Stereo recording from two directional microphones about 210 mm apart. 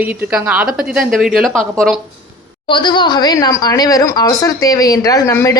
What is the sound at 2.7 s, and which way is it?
A woman's voice, 20° left (ahead or behind).